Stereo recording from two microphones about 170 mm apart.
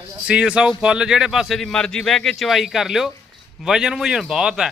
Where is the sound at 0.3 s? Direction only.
5° right (ahead or behind).